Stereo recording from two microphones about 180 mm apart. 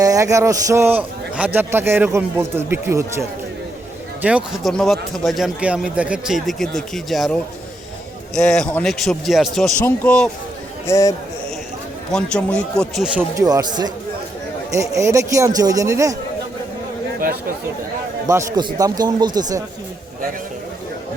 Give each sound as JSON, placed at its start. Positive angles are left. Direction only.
{"t": 0.0, "sound": "a man's voice", "side_deg": -20}
{"t": 8.4, "sound": "speech", "side_deg": 5}
{"t": 12.1, "sound": "speech", "side_deg": 5}
{"t": 13.1, "sound": "a man's voice", "side_deg": -20}
{"t": 18.3, "sound": "a man's voice", "side_deg": -20}